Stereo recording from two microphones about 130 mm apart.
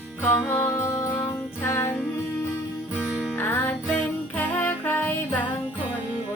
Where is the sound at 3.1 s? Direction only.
Centre (ahead or behind).